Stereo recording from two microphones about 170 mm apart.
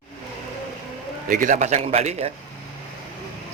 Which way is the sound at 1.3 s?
50° right (ahead or behind).